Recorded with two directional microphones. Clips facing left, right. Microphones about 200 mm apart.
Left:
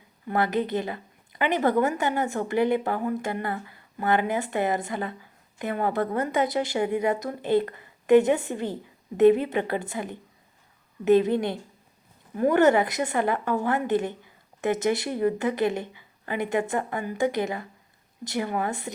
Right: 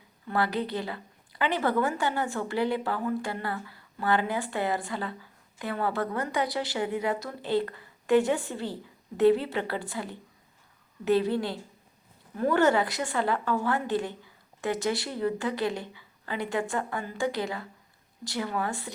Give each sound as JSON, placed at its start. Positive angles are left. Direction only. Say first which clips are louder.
{"t": 0.3, "sound": "a woman's voice", "louder": "left 4 dB", "side_deg": 20}